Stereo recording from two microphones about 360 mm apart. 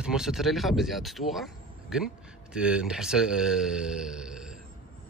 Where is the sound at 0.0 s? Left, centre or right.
Centre.